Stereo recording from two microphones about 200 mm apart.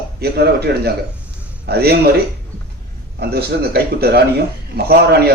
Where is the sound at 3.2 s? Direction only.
55° right (ahead or behind).